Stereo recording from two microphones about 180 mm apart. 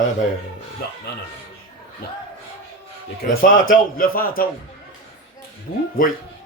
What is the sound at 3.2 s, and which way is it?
A man's voice, 50° left (ahead or behind).